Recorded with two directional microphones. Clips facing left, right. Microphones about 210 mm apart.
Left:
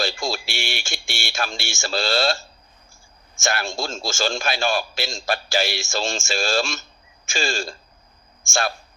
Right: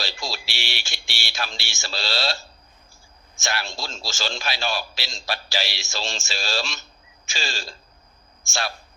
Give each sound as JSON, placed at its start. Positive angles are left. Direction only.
{"t": 0.0, "sound": "a man's voice", "side_deg": 50}